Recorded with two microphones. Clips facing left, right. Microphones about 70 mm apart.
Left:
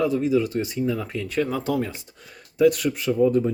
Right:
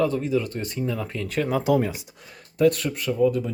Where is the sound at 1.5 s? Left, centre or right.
Centre.